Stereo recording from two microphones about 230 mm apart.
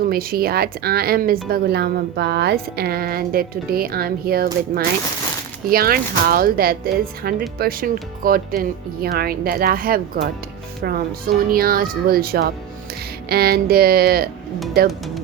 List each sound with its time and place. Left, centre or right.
0.1 s speech: right